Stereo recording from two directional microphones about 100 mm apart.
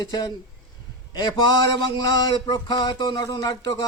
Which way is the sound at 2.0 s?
45° left (ahead or behind).